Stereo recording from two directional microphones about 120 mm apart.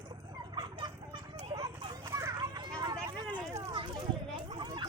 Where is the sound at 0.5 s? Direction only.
40° right (ahead or behind).